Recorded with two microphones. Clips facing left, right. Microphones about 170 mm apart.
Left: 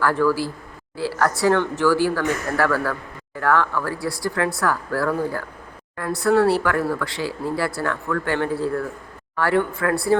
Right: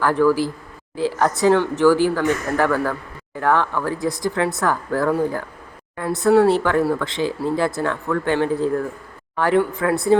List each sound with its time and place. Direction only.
0.0 s speech: 15° right (ahead or behind)